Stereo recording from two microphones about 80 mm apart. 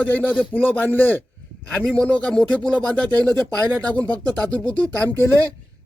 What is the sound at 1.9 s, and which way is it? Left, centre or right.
Speech, centre.